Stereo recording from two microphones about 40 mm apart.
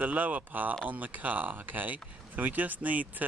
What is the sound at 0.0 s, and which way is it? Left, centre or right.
Speech, right.